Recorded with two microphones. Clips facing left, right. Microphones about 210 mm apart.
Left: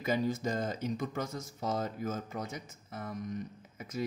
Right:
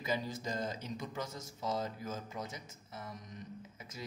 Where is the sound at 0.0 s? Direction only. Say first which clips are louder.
Left 6 dB; 50° left (ahead or behind).